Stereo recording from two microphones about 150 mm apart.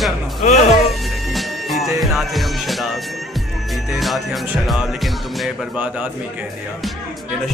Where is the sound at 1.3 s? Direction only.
Centre (ahead or behind).